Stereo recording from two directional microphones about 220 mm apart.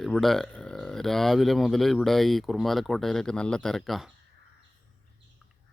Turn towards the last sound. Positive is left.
turn(degrees=0)  # may be behind; listen again after turning